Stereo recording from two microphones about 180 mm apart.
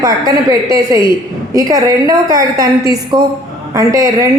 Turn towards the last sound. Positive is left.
turn(degrees=-20)  # may be behind; listen again after turning